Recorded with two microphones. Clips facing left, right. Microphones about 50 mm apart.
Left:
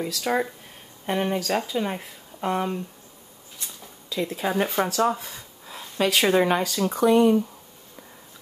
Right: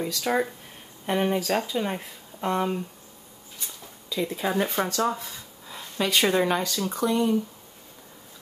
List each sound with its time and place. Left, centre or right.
0.0 s speech: centre
3.5 s a sound: centre
4.6 s speech: centre
7.1 s speech: left